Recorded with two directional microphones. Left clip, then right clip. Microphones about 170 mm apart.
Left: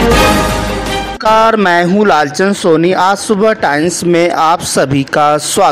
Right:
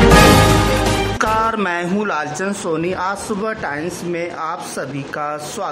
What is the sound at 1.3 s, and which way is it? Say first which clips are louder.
Speech: left 14 dB; 30° left (ahead or behind).